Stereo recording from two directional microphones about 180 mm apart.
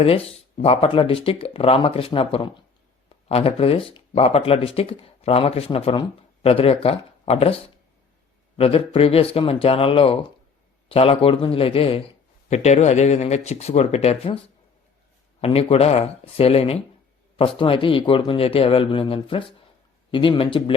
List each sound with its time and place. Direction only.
0.0 s speech: 35° left (ahead or behind)
15.4 s speech: 35° left (ahead or behind)